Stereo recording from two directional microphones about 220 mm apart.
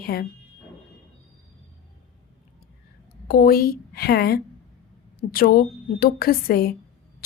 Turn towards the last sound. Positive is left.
turn(degrees=45)  # may be behind; listen again after turning